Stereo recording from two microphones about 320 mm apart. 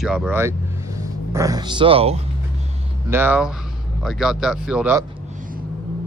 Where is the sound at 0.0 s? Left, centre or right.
Centre.